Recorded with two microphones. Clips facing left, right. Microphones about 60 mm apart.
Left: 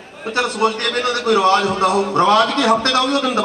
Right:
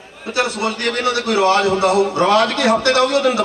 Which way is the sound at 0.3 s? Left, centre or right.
Left.